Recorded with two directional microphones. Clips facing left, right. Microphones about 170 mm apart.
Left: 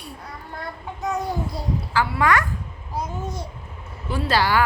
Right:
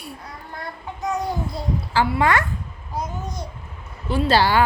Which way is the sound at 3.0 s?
5° left (ahead or behind).